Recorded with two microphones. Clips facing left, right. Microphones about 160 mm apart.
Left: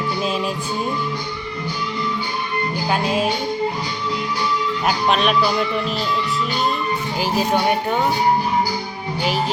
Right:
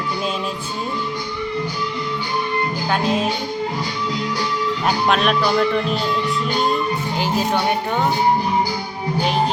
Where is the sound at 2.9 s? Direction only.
10° left (ahead or behind).